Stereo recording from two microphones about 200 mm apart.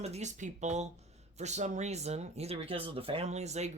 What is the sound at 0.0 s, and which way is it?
Speech, 35° right (ahead or behind).